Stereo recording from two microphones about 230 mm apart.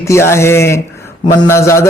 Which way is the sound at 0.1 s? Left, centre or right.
Centre.